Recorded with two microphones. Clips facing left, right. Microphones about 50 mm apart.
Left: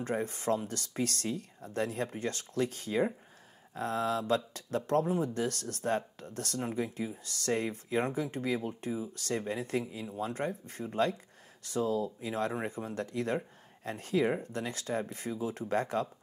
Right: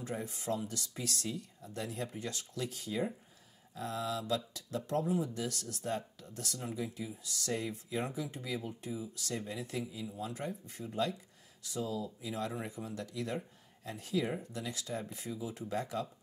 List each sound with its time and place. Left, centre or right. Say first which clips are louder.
0.0 s speech: left 7 dB; left